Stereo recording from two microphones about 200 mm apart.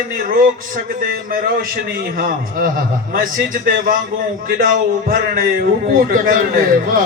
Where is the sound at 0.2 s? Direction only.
45° right (ahead or behind).